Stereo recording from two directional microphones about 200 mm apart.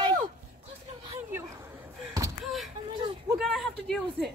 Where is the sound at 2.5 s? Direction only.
Centre (ahead or behind).